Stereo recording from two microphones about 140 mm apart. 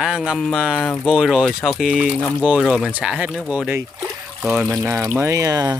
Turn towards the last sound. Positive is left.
turn(degrees=-25)  # may be behind; listen again after turning